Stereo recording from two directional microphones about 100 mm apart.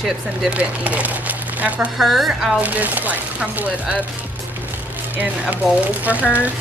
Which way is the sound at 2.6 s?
15° right (ahead or behind).